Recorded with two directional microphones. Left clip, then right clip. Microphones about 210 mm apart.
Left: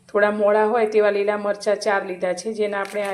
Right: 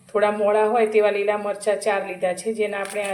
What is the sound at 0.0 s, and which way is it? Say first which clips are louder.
Speech: left 2 dB; 30° left (ahead or behind).